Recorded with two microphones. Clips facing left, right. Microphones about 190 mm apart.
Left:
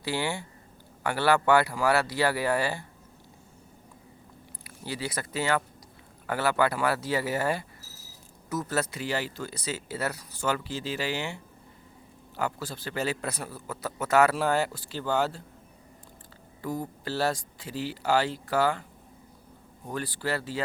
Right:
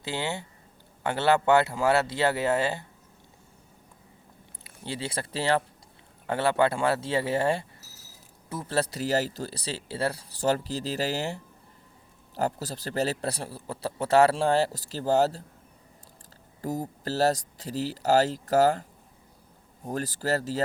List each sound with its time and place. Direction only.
0.0 s speech: 20° right (ahead or behind)
4.6 s a man's voice: 25° right (ahead or behind)
16.6 s a man's voice: 40° right (ahead or behind)
19.9 s a man's voice: 40° right (ahead or behind)